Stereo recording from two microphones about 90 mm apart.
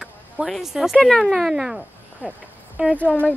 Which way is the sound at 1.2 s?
5° right (ahead or behind).